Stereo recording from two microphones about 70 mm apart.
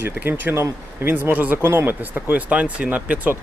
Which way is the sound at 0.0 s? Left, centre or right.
Right.